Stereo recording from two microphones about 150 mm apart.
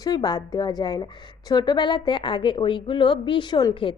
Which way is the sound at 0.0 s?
25° left (ahead or behind).